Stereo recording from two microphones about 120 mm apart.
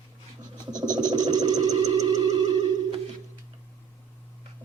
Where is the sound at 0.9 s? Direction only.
35° right (ahead or behind).